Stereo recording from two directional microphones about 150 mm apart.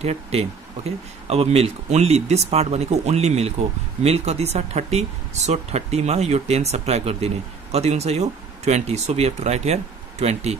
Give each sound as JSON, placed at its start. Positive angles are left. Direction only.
{"t": 0.0, "sound": "speech", "side_deg": -45}